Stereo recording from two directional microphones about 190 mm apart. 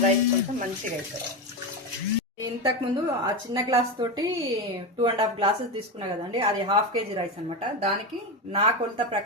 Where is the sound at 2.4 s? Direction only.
25° right (ahead or behind).